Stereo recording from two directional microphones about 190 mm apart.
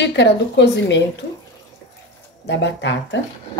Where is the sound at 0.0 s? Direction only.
65° left (ahead or behind).